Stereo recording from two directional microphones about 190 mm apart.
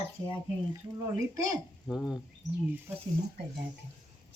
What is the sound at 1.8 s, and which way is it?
Speech, centre (ahead or behind).